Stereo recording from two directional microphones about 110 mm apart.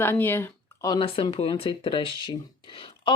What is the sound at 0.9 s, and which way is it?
Speech, 55° left (ahead or behind).